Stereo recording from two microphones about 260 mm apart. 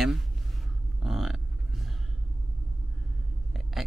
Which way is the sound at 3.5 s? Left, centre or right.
Centre.